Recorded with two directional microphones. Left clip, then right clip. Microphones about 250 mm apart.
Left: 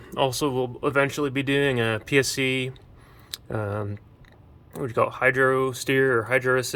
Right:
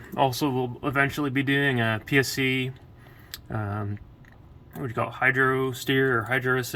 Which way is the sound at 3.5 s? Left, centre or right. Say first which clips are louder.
Left 4 dB; centre.